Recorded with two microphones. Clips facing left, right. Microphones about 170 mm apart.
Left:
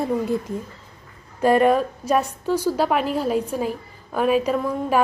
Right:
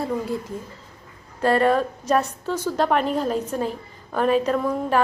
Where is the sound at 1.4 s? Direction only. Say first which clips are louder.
Left 2 dB; 15° left (ahead or behind).